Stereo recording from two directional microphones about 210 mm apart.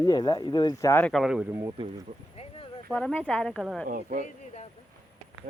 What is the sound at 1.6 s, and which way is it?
Speech, 25° right (ahead or behind).